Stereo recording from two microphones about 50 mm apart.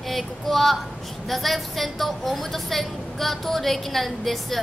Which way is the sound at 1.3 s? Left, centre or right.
Centre.